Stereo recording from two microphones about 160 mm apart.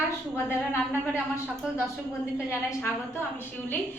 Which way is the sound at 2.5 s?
15° left (ahead or behind).